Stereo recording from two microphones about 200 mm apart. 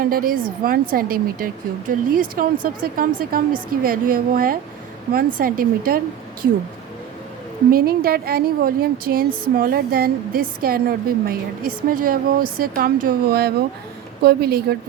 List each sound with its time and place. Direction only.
0.0 s a woman's voice: 45° right (ahead or behind)
7.7 s a woman's voice: 50° right (ahead or behind)